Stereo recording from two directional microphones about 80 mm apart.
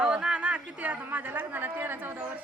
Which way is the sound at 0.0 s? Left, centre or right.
Centre.